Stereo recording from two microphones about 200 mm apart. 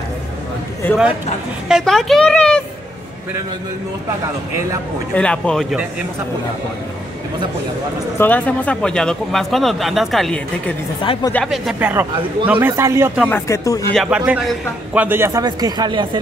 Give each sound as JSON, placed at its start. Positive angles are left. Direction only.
{"t": 1.7, "sound": "a woman's voice", "side_deg": 0}
{"t": 5.1, "sound": "speech", "side_deg": 5}
{"t": 8.2, "sound": "speech", "side_deg": 10}
{"t": 11.0, "sound": "speech", "side_deg": 25}
{"t": 11.3, "sound": "a man's voice", "side_deg": 0}
{"t": 13.3, "sound": "speech", "side_deg": 15}
{"t": 13.9, "sound": "a man's voice", "side_deg": -5}